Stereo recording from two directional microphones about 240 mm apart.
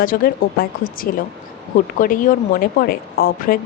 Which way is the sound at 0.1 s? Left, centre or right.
Left.